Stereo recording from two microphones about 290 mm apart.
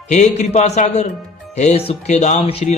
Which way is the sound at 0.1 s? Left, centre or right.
Left.